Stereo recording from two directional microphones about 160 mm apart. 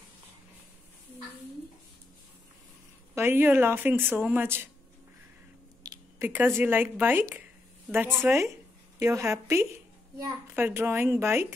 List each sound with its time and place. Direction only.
3.2 s speech: 15° right (ahead or behind)
5.9 s speech: 15° right (ahead or behind)